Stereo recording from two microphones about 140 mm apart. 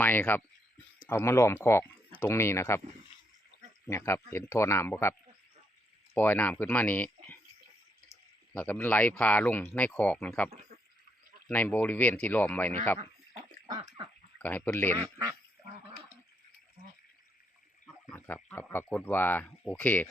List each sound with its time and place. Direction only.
0.0 s speech: 15° left (ahead or behind)
3.8 s speech: 20° left (ahead or behind)
6.1 s speech: 15° left (ahead or behind)
8.5 s speech: 10° left (ahead or behind)
13.7 s a sound: 25° right (ahead or behind)
14.3 s speech: 10° left (ahead or behind)
18.1 s speech: 15° left (ahead or behind)